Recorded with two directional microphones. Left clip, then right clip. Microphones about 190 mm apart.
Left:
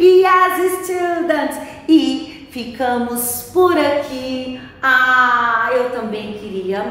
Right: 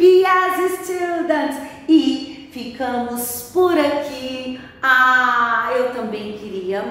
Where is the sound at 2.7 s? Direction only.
20° left (ahead or behind).